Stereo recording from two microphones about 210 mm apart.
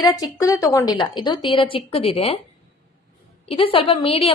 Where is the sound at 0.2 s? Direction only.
15° left (ahead or behind).